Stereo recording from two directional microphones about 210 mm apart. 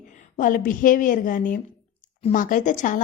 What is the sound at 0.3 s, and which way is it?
A woman's voice, 40° left (ahead or behind).